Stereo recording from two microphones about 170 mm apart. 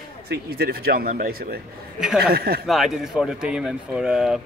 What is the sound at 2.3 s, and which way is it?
Speech, 65° right (ahead or behind).